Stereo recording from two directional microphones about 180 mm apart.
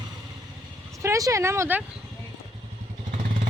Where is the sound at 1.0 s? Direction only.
15° right (ahead or behind).